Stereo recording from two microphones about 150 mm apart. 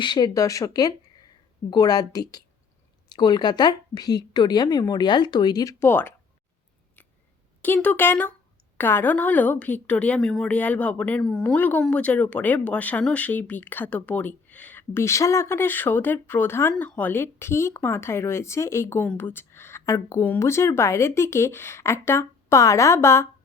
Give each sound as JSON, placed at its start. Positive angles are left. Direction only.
{"t": 0.0, "sound": "a woman's voice", "side_deg": 30}
{"t": 5.8, "sound": "speech", "side_deg": 15}
{"t": 7.6, "sound": "speech", "side_deg": 10}